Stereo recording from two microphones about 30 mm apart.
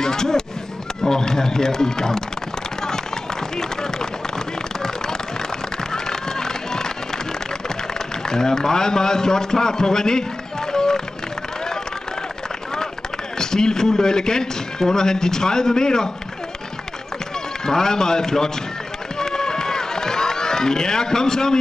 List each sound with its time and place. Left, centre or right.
0.0 s a sound: centre
1.0 s a man's voice: centre
3.5 s a man's voice: centre
6.0 s music: centre
8.3 s a man's voice: centre
10.7 s music: centre
13.4 s a man's voice: left
17.6 s a man's voice: centre
19.1 s run: left